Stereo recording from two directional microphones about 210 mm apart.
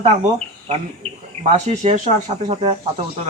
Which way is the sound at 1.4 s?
35° right (ahead or behind).